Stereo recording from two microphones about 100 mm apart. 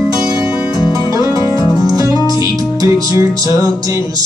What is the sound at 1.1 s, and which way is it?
Music, 35° right (ahead or behind).